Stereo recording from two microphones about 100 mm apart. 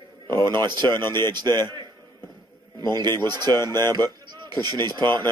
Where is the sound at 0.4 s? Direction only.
45° right (ahead or behind).